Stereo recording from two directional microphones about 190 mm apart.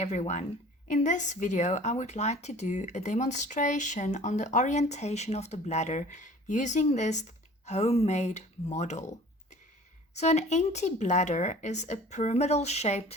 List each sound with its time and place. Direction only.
0.0 s speech: 35° left (ahead or behind)
10.2 s speech: 35° left (ahead or behind)